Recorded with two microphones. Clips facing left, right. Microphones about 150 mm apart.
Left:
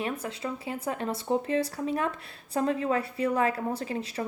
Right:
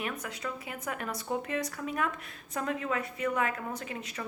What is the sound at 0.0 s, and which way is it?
Speech, 30° left (ahead or behind).